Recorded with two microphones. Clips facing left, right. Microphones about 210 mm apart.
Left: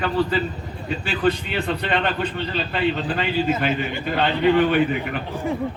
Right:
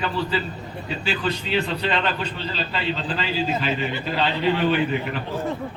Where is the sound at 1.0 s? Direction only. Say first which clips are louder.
Left 5 dB; 55° left (ahead or behind).